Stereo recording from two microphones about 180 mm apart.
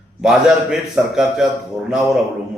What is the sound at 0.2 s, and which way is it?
A man's voice, 5° right (ahead or behind).